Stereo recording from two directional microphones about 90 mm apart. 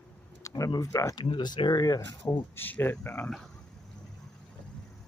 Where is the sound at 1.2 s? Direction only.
60° left (ahead or behind).